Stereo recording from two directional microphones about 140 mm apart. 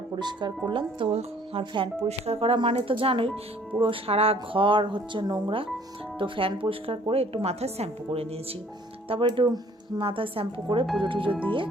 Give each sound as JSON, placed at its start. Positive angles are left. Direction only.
{"t": 0.2, "sound": "speech", "side_deg": -30}